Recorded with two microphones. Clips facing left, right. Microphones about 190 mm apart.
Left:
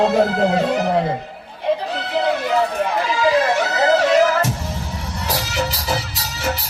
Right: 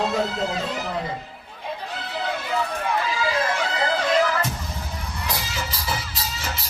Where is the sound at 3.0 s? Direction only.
75° left (ahead or behind).